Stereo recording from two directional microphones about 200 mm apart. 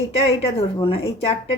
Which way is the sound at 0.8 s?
30° left (ahead or behind).